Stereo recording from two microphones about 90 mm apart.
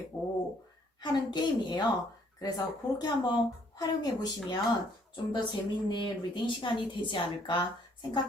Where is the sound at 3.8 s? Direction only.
50° left (ahead or behind).